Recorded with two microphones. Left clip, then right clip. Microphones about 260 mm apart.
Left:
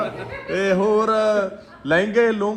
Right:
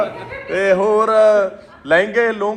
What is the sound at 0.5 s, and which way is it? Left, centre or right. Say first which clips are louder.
A man's voice: right 4 dB; centre.